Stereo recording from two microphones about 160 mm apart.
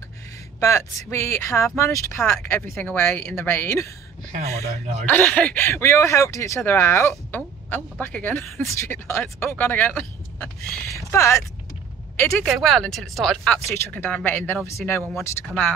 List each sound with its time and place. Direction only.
0.6 s speech: 20° left (ahead or behind)
5.0 s speech: 10° left (ahead or behind)
12.4 s speech: centre (ahead or behind)
13.7 s speech: 15° left (ahead or behind)